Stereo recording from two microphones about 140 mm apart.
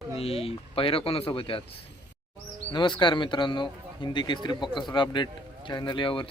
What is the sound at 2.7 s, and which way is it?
Speech, 35° left (ahead or behind).